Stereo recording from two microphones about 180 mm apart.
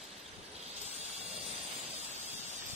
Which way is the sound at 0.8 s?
35° right (ahead or behind).